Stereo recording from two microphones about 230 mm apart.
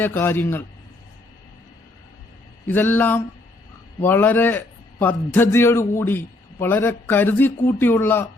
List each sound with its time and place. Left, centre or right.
0.0 s a man's voice: centre
2.6 s a man's voice: centre